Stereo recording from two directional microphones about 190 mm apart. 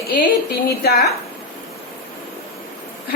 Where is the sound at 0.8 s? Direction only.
55° left (ahead or behind).